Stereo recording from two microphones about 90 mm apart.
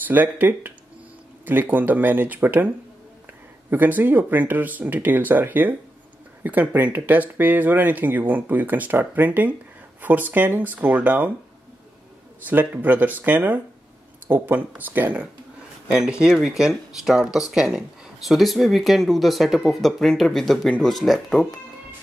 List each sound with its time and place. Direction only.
0.1 s speech: 20° right (ahead or behind)
3.7 s speech: 20° right (ahead or behind)
12.4 s speech: 20° right (ahead or behind); by 21.5 s 5° left (ahead or behind)